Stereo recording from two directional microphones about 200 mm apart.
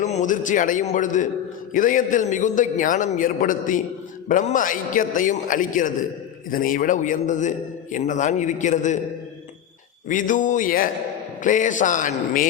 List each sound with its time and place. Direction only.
0.0 s a man's voice: 35° left (ahead or behind)
10.1 s a man's voice: 40° left (ahead or behind)